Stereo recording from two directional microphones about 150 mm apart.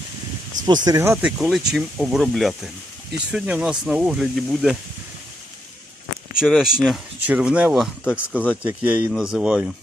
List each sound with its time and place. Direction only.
0.6 s speech: 25° right (ahead or behind)
1.2 s speech: centre (ahead or behind)
6.3 s speech: 5° right (ahead or behind)